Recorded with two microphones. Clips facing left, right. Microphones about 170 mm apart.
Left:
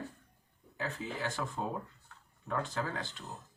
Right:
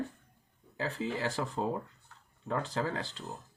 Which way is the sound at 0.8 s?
35° right (ahead or behind).